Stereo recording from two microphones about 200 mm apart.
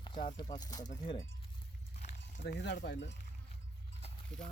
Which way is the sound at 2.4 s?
60° left (ahead or behind).